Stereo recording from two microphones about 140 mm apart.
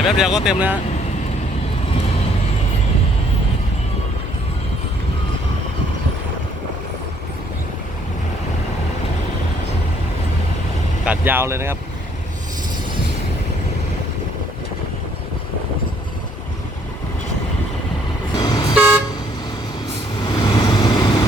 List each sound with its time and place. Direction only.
0.2 s speech: 5° right (ahead or behind)
11.0 s speech: 10° right (ahead or behind)
18.4 s toot: 25° left (ahead or behind)
18.7 s toot: 10° right (ahead or behind)
20.3 s vehicle: 30° left (ahead or behind)